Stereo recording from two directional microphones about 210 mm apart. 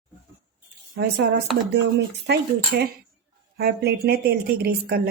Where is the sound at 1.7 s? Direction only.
55° right (ahead or behind).